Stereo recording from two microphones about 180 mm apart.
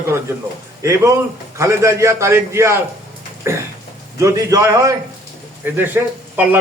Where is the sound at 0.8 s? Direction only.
15° right (ahead or behind).